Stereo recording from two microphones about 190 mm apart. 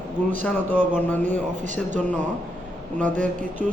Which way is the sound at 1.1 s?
10° left (ahead or behind).